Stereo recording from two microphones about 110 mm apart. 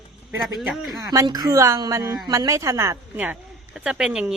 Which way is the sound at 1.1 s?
35° right (ahead or behind).